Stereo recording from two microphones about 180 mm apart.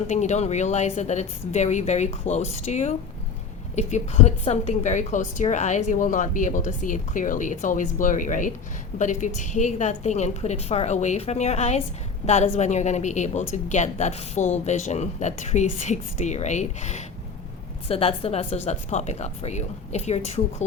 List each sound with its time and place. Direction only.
0.1 s a woman's voice: 40° left (ahead or behind)